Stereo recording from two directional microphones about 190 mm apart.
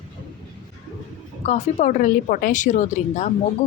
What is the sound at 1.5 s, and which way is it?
A woman's voice, 40° left (ahead or behind).